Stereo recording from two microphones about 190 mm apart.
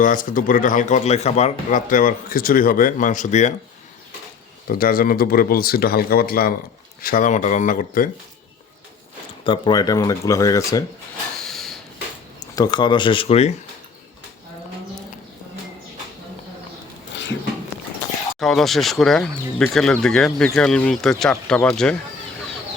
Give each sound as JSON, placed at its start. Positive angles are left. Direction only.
{"t": 0.0, "sound": "a man's voice", "side_deg": 45}
{"t": 4.7, "sound": "a man's voice", "side_deg": 50}
{"t": 9.4, "sound": "speech", "side_deg": 25}
{"t": 11.4, "sound": "rub", "side_deg": 0}
{"t": 12.4, "sound": "speech", "side_deg": 20}
{"t": 17.1, "sound": "a sound", "side_deg": 70}
{"t": 18.3, "sound": "speech", "side_deg": 0}